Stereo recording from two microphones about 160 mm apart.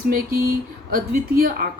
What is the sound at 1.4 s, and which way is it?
Speech, 65° right (ahead or behind).